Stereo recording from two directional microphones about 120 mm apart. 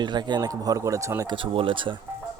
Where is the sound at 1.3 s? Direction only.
45° right (ahead or behind).